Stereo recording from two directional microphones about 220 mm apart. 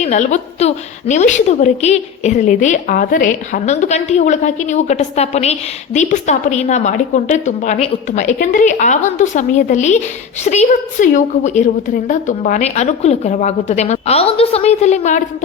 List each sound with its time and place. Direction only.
0.0 s a woman's voice: 30° left (ahead or behind)